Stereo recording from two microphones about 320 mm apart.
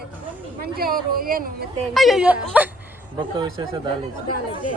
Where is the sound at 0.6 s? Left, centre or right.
Right.